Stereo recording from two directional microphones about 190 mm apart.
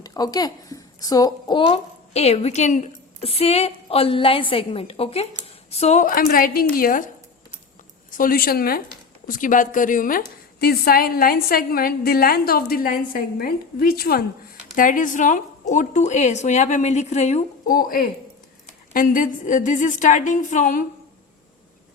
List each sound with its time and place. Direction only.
0.0 s a woman's voice: 20° left (ahead or behind); by 7.0 s 50° left (ahead or behind)
8.1 s a woman's voice: 50° left (ahead or behind)